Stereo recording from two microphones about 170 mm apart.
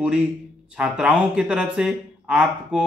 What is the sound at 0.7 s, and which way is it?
Speech, 5° right (ahead or behind).